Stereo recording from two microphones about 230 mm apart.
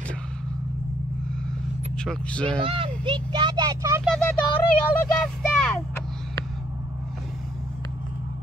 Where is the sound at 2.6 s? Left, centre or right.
Right.